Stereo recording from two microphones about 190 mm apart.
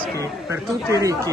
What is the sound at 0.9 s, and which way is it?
Speech, 15° right (ahead or behind).